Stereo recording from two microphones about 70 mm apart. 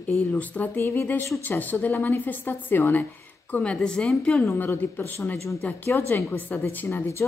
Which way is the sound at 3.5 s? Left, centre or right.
Centre.